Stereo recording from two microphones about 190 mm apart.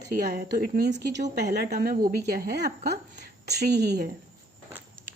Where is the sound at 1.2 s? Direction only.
40° right (ahead or behind); by 4.1 s 60° right (ahead or behind).